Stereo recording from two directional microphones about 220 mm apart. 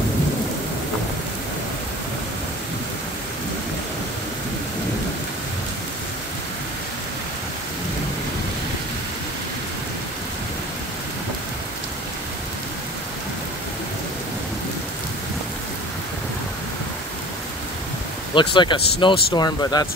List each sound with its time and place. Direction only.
18.3 s speech: 20° left (ahead or behind)